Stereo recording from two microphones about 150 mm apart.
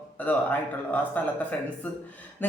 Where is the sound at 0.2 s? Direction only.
10° left (ahead or behind).